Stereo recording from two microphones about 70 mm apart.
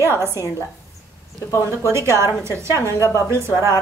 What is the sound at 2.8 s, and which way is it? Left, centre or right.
Speech, right.